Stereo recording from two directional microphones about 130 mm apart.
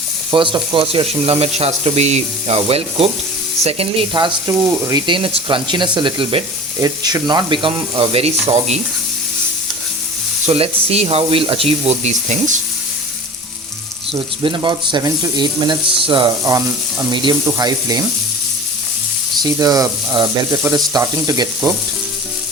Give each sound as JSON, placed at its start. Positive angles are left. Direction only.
{"t": 0.3, "sound": "speech", "side_deg": -40}
{"t": 4.1, "sound": "speech", "side_deg": -30}
{"t": 10.4, "sound": "speech", "side_deg": -50}
{"t": 14.1, "sound": "speech", "side_deg": -40}
{"t": 16.4, "sound": "speech", "side_deg": -25}
{"t": 17.1, "sound": "speech", "side_deg": -35}
{"t": 19.4, "sound": "speech", "side_deg": -30}